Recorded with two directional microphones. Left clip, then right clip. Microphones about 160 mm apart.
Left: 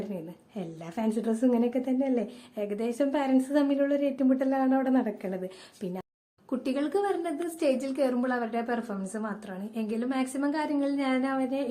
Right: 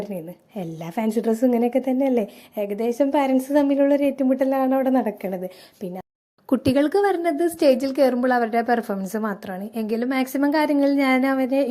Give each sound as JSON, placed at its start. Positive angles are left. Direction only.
{"t": 0.1, "sound": "a woman's voice", "side_deg": -30}
{"t": 6.5, "sound": "a woman's voice", "side_deg": -50}